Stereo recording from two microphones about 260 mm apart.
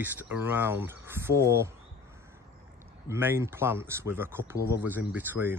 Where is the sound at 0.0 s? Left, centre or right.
Centre.